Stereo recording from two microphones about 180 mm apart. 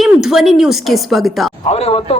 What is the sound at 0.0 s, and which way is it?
A woman's voice, centre (ahead or behind).